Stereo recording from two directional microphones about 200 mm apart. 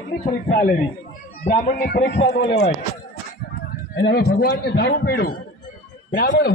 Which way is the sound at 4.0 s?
55° left (ahead or behind).